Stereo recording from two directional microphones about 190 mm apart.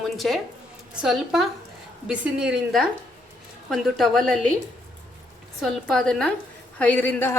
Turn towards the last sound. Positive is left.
turn(degrees=10)  # may be behind; listen again after turning